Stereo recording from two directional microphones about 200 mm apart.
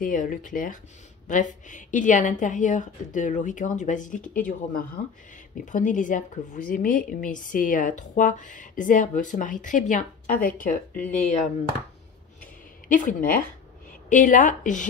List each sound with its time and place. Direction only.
0.0 s a woman's voice: 45° left (ahead or behind)
12.8 s a woman's voice: 40° left (ahead or behind)